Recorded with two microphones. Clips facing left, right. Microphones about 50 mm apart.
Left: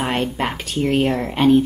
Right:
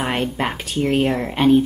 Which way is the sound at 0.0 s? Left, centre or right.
Centre.